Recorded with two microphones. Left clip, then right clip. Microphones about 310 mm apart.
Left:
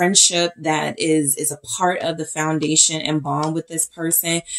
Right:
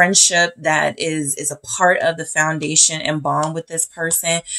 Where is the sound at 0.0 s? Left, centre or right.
Right.